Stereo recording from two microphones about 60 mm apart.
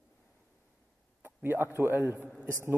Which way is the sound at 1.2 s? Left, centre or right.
Right.